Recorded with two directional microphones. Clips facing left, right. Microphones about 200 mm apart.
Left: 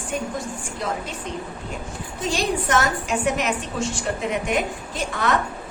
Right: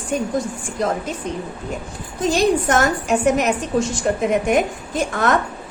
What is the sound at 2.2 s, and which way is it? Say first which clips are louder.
A woman's voice: right 7 dB; 45° right (ahead or behind).